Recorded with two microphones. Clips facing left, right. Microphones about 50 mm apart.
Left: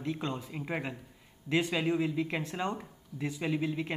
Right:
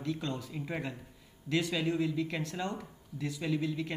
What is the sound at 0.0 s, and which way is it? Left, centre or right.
Speech, left.